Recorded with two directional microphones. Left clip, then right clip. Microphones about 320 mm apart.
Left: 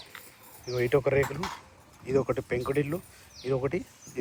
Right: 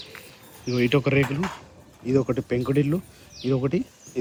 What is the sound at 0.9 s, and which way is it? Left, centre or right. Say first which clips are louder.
Speech: even; right.